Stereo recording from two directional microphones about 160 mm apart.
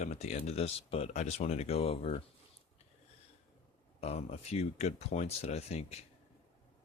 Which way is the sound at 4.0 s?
40° left (ahead or behind).